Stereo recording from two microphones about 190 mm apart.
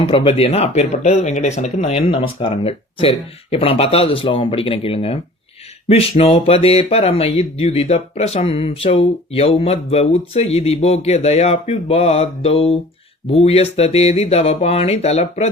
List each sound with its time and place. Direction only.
0.0 s speech: 30° left (ahead or behind)